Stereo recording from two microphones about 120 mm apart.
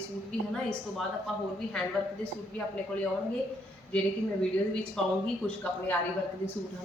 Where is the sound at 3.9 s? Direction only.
10° left (ahead or behind).